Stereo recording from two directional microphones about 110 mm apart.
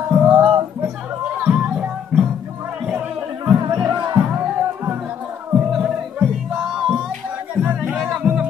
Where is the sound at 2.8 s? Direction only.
15° right (ahead or behind).